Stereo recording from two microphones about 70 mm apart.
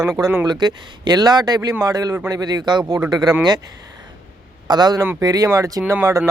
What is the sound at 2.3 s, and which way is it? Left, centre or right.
Speech, right.